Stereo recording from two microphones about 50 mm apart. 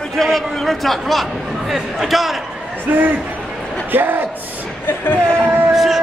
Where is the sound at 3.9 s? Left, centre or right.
Right.